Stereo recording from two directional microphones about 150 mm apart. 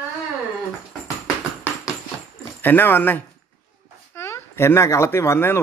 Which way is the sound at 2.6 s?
15° left (ahead or behind).